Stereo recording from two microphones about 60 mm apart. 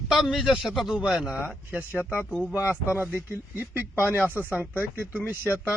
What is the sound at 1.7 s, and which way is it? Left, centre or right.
Speech, right.